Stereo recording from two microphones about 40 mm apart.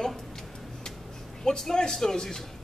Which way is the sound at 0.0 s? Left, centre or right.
Centre.